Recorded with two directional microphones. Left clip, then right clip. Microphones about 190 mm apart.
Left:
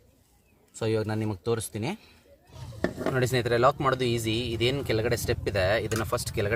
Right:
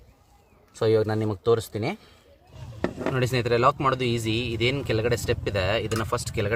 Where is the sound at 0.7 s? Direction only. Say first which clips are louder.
Right 6 dB; 25° right (ahead or behind).